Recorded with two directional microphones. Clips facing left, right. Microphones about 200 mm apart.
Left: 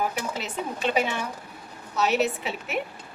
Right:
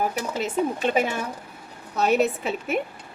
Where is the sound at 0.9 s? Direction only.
50° right (ahead or behind).